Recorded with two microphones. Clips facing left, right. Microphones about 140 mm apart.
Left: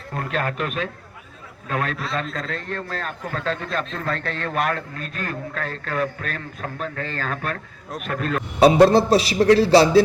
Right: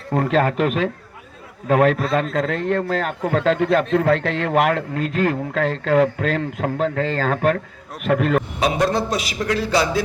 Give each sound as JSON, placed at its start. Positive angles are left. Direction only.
{"t": 0.3, "sound": "a man's voice", "side_deg": -90}
{"t": 1.7, "sound": "speech", "side_deg": -80}
{"t": 2.2, "sound": "a man's voice", "side_deg": -60}
{"t": 8.6, "sound": "a man's voice", "side_deg": 30}